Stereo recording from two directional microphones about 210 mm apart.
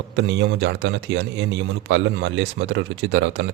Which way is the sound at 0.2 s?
60° right (ahead or behind).